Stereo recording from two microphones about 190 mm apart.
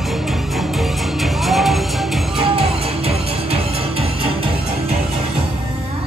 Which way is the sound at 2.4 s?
30° right (ahead or behind).